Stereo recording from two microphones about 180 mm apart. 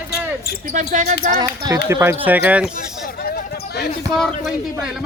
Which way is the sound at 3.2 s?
60° left (ahead or behind).